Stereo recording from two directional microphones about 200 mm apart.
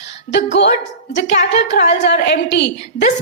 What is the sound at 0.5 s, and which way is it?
A woman's voice, 60° left (ahead or behind).